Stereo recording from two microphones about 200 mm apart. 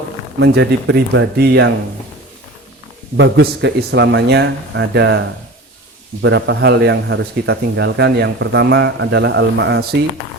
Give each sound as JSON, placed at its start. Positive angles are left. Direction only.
{"t": 0.3, "sound": "speech", "side_deg": -60}
{"t": 3.2, "sound": "speech", "side_deg": -60}
{"t": 6.2, "sound": "speech", "side_deg": -60}